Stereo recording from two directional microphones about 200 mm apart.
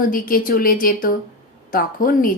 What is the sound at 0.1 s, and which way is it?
Speech, 45° left (ahead or behind).